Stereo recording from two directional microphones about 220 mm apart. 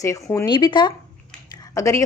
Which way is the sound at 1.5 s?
15° left (ahead or behind).